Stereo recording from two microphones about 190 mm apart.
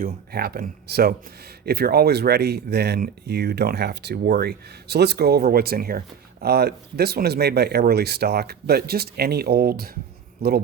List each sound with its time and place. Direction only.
0.0 s speech: 55° right (ahead or behind)